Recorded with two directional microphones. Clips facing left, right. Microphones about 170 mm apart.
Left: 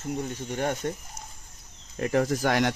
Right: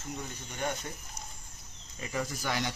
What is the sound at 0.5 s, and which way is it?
Speech, 60° left (ahead or behind).